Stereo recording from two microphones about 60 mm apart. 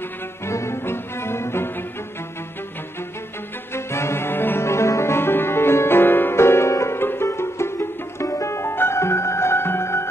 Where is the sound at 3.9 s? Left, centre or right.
Left.